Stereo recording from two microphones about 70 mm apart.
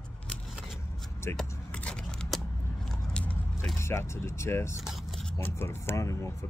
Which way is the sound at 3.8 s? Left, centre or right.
Left.